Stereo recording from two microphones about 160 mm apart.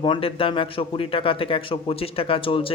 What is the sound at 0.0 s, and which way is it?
Speech, 35° left (ahead or behind).